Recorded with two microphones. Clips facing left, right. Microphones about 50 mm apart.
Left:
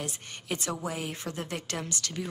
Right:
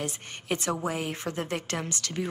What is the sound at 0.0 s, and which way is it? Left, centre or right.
A woman's voice, right.